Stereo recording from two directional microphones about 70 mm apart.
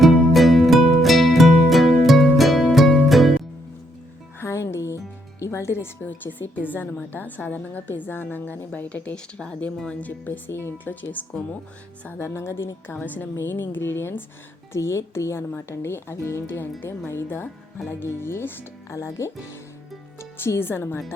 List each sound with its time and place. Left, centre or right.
0.0 s music: centre
4.4 s speech: left
12.0 s speech: left
18.9 s speech: left